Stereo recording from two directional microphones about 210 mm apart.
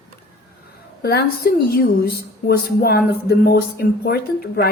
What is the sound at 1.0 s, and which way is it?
A woman's voice, 50° left (ahead or behind).